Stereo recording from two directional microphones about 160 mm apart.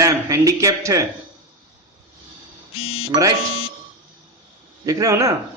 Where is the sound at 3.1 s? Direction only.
20° right (ahead or behind).